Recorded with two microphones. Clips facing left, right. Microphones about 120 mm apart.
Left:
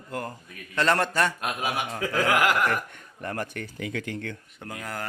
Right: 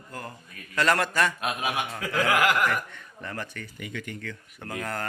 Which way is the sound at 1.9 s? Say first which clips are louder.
Left 1 dB; 35° left (ahead or behind).